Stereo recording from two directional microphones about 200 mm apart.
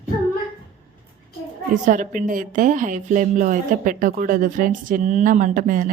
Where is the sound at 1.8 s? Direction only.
40° right (ahead or behind).